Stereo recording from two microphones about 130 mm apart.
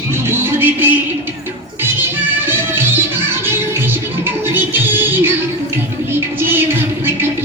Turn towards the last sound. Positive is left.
turn(degrees=-15)  # may be behind; listen again after turning